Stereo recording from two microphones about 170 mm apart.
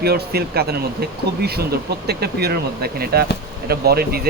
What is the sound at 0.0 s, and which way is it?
Speech, 65° right (ahead or behind).